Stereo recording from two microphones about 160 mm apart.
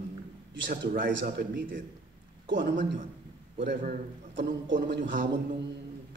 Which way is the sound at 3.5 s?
90° right.